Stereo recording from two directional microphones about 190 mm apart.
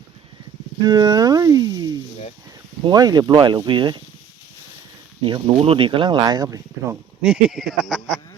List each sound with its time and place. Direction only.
0.8 s speech: 20° right (ahead or behind)
5.2 s speech: 30° right (ahead or behind)
7.2 s speech: centre (ahead or behind)